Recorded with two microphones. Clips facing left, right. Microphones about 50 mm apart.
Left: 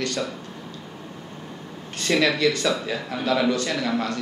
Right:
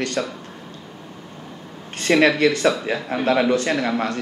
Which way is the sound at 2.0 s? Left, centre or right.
Right.